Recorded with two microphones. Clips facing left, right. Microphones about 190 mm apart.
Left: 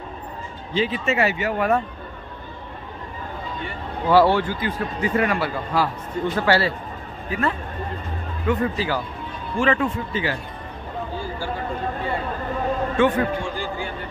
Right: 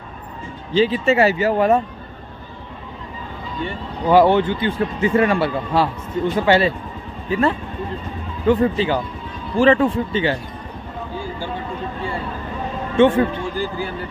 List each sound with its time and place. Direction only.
0.7 s speech: 30° right (ahead or behind)
4.1 s a man's voice: 20° right (ahead or behind)
7.2 s a man's voice: 30° right (ahead or behind)
12.9 s a man's voice: 25° right (ahead or behind)